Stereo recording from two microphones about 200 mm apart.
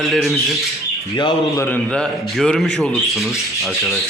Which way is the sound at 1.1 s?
20° left (ahead or behind).